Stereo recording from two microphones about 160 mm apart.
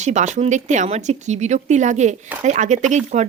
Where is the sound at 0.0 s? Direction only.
45° right (ahead or behind).